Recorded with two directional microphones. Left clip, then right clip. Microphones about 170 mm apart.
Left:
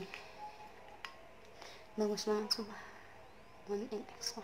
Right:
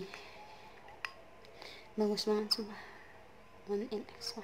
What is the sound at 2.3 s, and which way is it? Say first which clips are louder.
Speech: right 2 dB; 30° right (ahead or behind).